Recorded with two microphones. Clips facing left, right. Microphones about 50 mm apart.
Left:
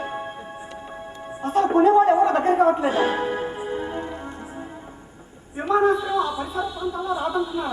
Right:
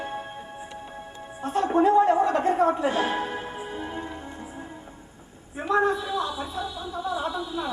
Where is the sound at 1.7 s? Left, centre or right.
Centre.